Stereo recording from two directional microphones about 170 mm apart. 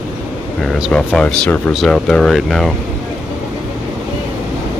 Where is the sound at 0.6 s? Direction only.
Centre (ahead or behind).